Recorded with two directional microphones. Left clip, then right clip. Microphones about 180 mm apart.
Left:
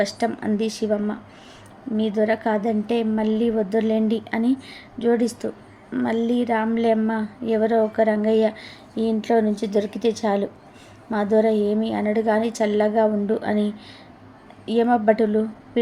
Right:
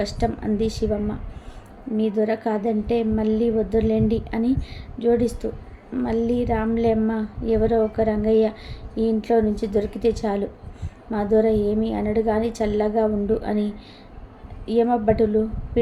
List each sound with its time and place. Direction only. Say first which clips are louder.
0.0 s a woman's voice: left 2 dB; 10° left (ahead or behind)